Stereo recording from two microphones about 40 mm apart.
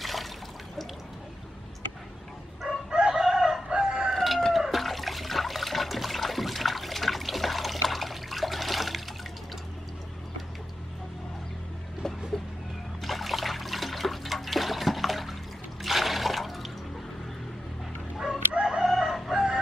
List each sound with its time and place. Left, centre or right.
0.0 s water: centre
2.9 s chicken: centre
3.6 s crowing: centre
4.1 s chicken: centre
4.6 s trickle: centre
13.0 s liquid: centre
15.8 s water: centre
18.1 s crowing: centre
18.7 s chicken: centre
19.1 s crowing: centre